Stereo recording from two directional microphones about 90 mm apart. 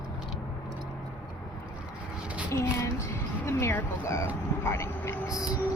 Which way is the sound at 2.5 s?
30° left (ahead or behind).